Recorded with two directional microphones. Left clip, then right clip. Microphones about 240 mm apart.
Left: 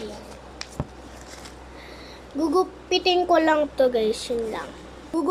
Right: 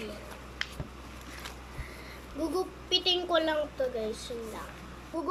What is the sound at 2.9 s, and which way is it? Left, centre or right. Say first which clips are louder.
Speech: left 2 dB; centre.